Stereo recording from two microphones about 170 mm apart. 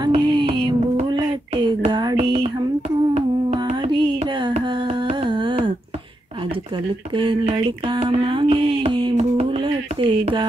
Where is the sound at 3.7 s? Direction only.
25° right (ahead or behind).